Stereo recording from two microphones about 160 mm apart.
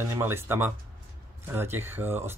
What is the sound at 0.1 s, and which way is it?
Speech, 15° right (ahead or behind).